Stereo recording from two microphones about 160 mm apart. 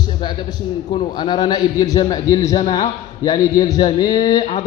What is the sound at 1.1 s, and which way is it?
A man's voice, 25° left (ahead or behind).